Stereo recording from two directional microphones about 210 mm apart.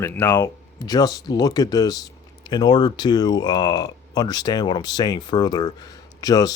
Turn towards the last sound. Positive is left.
turn(degrees=20)  # may be behind; listen again after turning